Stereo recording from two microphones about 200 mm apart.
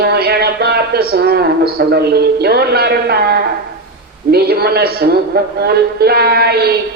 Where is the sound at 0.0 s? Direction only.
50° right (ahead or behind).